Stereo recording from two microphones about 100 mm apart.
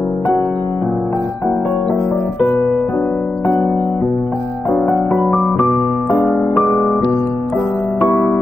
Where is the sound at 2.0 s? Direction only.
15° left (ahead or behind).